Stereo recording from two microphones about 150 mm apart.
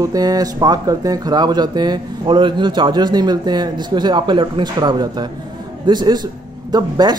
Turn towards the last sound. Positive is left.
turn(degrees=-30)  # may be behind; listen again after turning